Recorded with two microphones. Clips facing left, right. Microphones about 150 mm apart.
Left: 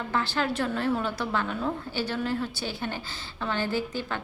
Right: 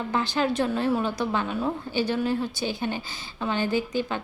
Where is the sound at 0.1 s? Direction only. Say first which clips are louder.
Right 3 dB; 15° right (ahead or behind).